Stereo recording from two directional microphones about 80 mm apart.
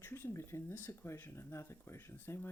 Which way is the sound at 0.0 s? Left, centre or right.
Left.